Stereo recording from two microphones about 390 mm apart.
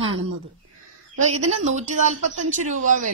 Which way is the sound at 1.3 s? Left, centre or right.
Centre.